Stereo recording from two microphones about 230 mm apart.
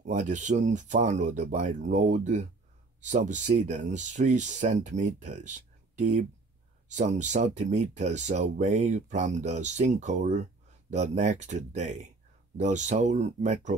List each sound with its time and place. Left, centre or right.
0.0 s speech: right